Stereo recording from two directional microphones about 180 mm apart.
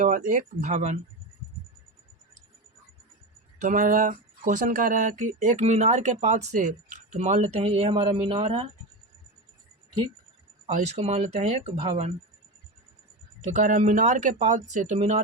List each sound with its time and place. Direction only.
0.0 s speech: 45° right (ahead or behind)
3.6 s speech: 50° right (ahead or behind); by 8.6 s 30° right (ahead or behind)
10.7 s speech: 40° right (ahead or behind)
13.4 s speech: 45° right (ahead or behind)